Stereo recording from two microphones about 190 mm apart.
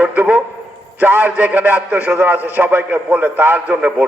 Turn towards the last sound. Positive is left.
turn(degrees=-5)  # may be behind; listen again after turning